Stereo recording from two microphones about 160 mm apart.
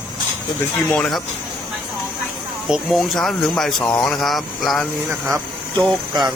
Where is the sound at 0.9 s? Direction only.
5° left (ahead or behind).